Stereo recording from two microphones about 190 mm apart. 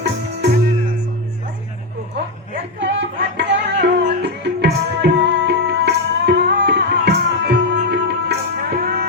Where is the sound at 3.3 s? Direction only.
65° right (ahead or behind).